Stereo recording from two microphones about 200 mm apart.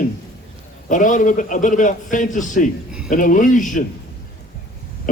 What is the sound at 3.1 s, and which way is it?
Speech, 40° left (ahead or behind).